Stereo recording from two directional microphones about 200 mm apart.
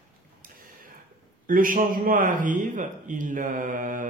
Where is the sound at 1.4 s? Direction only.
45° right (ahead or behind).